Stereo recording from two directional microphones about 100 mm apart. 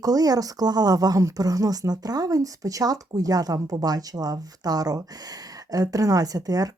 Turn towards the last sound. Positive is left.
turn(degrees=-40)  # may be behind; listen again after turning